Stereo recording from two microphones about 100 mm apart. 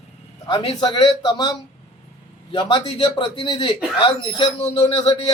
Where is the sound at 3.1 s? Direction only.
50° left (ahead or behind).